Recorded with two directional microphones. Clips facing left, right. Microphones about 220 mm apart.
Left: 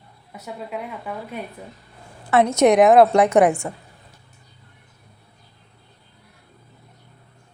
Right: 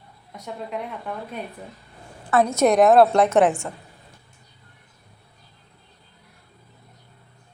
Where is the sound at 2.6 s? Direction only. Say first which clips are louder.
Left 2 dB; 15° left (ahead or behind).